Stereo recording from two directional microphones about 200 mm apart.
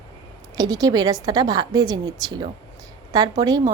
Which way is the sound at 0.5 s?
20° right (ahead or behind).